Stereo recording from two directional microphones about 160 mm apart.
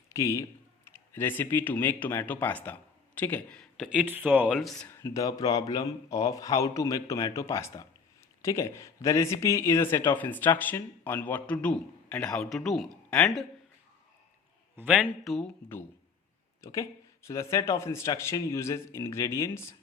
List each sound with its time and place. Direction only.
0.1 s speech: 20° left (ahead or behind)
3.8 s speech: 10° right (ahead or behind)
5.0 s speech: 20° left (ahead or behind); by 13.4 s 5° left (ahead or behind)
15.0 s speech: centre (ahead or behind)
16.6 s speech: 20° left (ahead or behind)